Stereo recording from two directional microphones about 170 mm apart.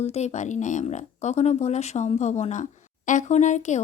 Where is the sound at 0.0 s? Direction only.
40° left (ahead or behind).